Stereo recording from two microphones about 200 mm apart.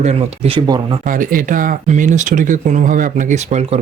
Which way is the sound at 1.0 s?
40° right (ahead or behind).